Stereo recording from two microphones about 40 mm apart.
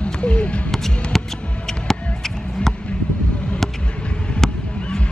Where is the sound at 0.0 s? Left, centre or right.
Left.